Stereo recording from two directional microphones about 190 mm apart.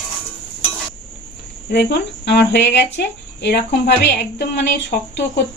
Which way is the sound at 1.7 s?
65° left (ahead or behind).